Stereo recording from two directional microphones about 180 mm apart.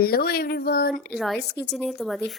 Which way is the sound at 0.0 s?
55° left (ahead or behind).